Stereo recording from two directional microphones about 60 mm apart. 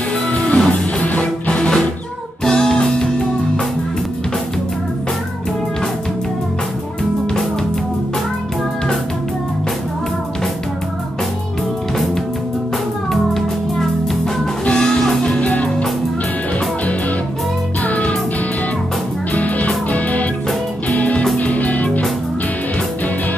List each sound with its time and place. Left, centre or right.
0.3 s music: left
13.1 s music: centre
14.6 s music: centre
17.8 s music: left
19.3 s music: left